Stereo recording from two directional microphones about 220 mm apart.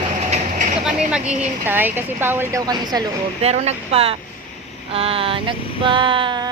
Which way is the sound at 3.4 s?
30° right (ahead or behind).